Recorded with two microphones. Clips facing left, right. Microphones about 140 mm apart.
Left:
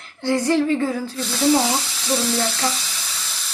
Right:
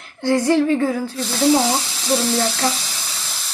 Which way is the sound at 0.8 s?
15° right (ahead or behind).